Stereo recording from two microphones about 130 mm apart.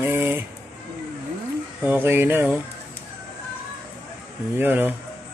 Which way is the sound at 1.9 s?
15° right (ahead or behind).